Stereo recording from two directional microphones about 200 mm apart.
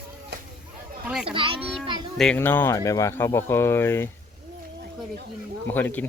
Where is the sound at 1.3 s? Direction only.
25° right (ahead or behind).